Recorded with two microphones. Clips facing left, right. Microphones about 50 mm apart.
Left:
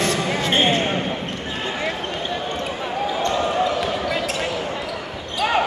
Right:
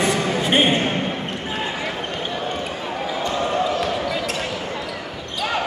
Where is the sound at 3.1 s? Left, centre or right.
Centre.